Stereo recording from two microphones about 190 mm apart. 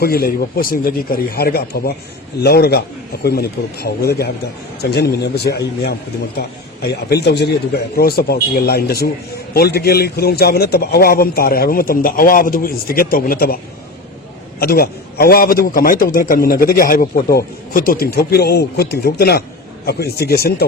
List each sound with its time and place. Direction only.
0.0 s a man's voice: 55° left (ahead or behind)
14.6 s a man's voice: 55° left (ahead or behind)